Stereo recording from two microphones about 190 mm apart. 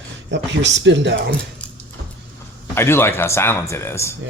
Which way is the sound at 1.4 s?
5° left (ahead or behind).